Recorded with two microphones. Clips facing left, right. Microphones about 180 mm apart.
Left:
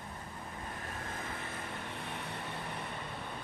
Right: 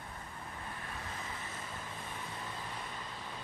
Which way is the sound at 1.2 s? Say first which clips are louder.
Left 3 dB; 60° left (ahead or behind).